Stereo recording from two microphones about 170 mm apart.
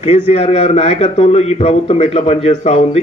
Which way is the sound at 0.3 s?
40° left (ahead or behind).